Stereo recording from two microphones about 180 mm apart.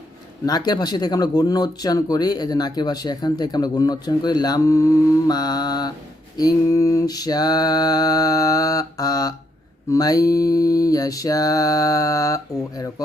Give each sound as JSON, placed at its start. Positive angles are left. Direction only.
{"t": 0.4, "sound": "speech", "side_deg": 20}